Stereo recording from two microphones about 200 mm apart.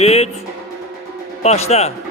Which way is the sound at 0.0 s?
30° left (ahead or behind).